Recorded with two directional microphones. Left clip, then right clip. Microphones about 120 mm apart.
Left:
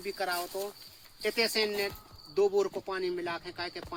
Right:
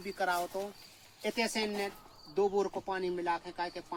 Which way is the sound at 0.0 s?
15° right (ahead or behind).